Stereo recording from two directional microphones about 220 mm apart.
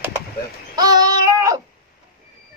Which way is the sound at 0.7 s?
20° right (ahead or behind).